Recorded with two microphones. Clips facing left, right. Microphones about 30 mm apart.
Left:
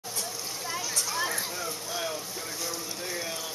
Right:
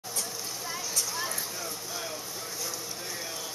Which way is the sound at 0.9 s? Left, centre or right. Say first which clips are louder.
Left 3 dB; left.